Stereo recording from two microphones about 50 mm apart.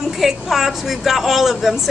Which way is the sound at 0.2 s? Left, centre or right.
Centre.